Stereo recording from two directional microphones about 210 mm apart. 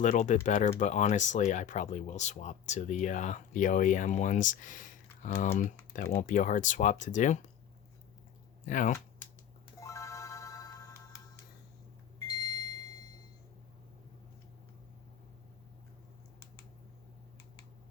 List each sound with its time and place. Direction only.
0.0 s speech: 35° left (ahead or behind)
8.6 s speech: 40° left (ahead or behind)
9.8 s music: 15° left (ahead or behind)
12.3 s a sound: 20° left (ahead or behind)